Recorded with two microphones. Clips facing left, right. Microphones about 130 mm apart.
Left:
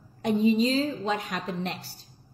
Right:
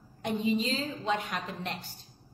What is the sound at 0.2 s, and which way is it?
A woman's voice, 40° left (ahead or behind).